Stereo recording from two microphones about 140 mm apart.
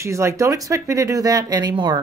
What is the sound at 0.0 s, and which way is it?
Speech, 20° right (ahead or behind).